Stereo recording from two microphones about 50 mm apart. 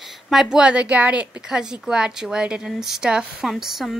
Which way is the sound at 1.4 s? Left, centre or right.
Centre.